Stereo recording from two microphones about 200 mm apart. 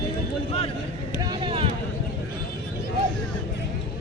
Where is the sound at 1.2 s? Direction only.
20° right (ahead or behind).